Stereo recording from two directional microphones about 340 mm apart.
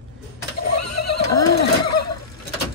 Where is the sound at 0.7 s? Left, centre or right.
Left.